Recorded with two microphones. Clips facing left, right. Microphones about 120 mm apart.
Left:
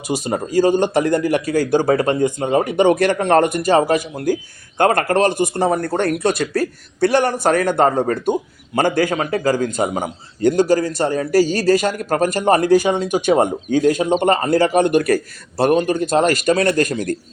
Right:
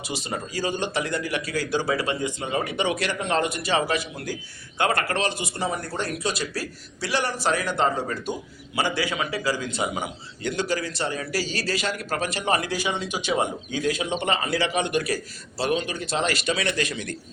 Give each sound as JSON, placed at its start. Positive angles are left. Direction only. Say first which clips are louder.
{"t": 0.0, "sound": "speech", "louder": "left 10 dB", "side_deg": 45}